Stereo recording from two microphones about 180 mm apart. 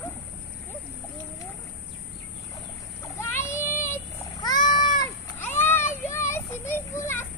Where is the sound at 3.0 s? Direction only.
15° left (ahead or behind).